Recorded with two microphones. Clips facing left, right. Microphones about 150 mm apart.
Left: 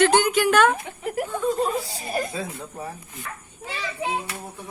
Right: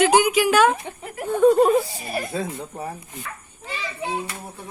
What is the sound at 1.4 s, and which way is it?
Chuckle, 65° right (ahead or behind).